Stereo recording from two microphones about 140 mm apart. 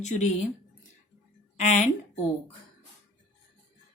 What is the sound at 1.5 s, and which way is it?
Speech, 60° left (ahead or behind).